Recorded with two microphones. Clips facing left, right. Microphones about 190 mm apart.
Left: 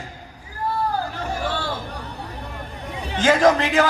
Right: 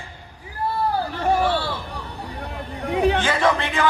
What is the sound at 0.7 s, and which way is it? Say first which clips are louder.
Hubbub: right 1 dB; 45° left (ahead or behind).